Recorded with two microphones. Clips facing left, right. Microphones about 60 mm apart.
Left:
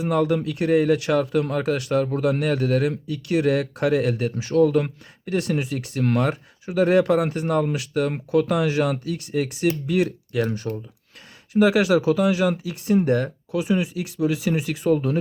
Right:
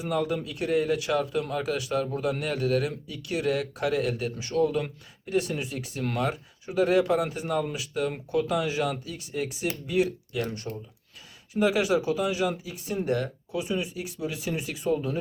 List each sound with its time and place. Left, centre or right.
0.1 s speech: left
11.5 s speech: left
13.1 s speech: left
13.5 s speech: left